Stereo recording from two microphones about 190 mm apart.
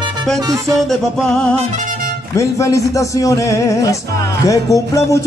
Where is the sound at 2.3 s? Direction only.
15° left (ahead or behind).